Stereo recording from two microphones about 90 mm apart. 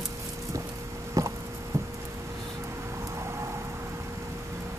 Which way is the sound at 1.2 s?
35° right (ahead or behind).